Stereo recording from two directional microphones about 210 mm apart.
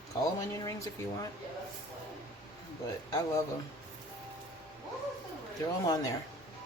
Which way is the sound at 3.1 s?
15° left (ahead or behind).